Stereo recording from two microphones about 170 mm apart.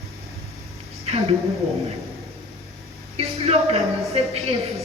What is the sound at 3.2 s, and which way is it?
Speech, 35° right (ahead or behind).